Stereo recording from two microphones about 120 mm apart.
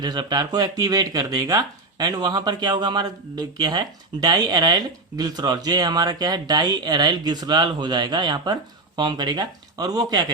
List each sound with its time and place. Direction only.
0.0 s speech: 35° right (ahead or behind)